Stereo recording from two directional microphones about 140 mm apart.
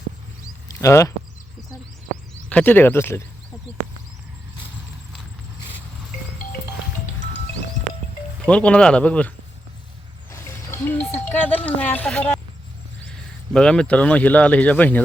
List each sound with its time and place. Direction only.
0.7 s speech: 20° left (ahead or behind)
2.5 s speech: 10° left (ahead or behind)
8.4 s speech: 10° left (ahead or behind)
10.3 s speech: 20° left (ahead or behind)